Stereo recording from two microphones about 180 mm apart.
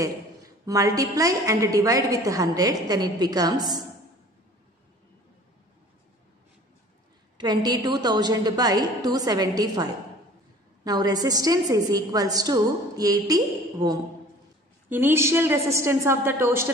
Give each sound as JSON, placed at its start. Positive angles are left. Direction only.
{"t": 0.7, "sound": "a woman's voice", "side_deg": -20}
{"t": 7.3, "sound": "a woman's voice", "side_deg": -25}